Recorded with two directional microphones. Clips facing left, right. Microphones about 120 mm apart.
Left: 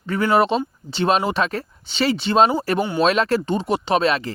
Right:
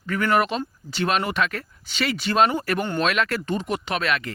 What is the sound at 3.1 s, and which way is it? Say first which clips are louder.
Speech: left 5 dB; 30° left (ahead or behind).